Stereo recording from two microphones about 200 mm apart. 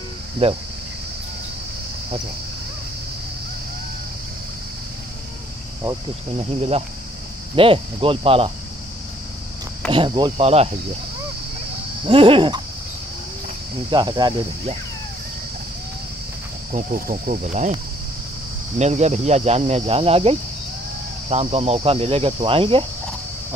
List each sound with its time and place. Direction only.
0.4 s speech: 30° right (ahead or behind)
5.8 s speech: 20° right (ahead or behind)
9.8 s speech: 25° right (ahead or behind)
12.1 s speech: 25° right (ahead or behind)
13.8 s speech: 20° right (ahead or behind)
16.7 s speech: 35° right (ahead or behind)
18.8 s speech: 35° right (ahead or behind)